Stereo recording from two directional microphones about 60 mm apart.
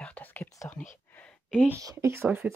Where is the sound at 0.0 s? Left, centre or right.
Left.